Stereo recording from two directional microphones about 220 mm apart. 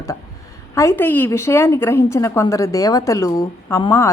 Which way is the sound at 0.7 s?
15° left (ahead or behind).